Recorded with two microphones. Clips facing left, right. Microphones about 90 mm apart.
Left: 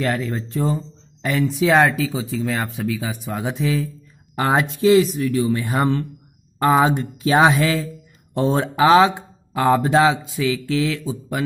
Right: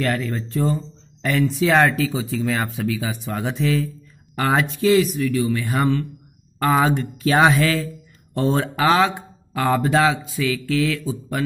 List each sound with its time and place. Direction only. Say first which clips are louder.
0.0 s speech: even; 15° left (ahead or behind)
4.4 s speech: left 1 dB; 20° left (ahead or behind)